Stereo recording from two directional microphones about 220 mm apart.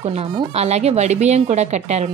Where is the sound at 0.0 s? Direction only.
30° right (ahead or behind).